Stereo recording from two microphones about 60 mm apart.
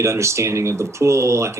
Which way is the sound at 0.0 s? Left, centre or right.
Right.